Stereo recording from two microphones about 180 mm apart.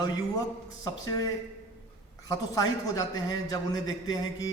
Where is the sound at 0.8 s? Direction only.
20° left (ahead or behind).